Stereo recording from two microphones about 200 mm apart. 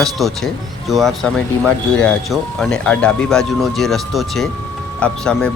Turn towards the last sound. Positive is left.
turn(degrees=5)  # may be behind; listen again after turning